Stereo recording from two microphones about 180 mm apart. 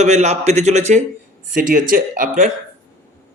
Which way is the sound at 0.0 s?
40° right (ahead or behind).